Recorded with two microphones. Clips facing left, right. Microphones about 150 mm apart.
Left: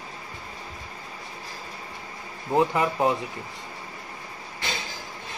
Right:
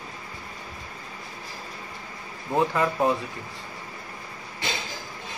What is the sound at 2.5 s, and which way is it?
Speech, 20° left (ahead or behind).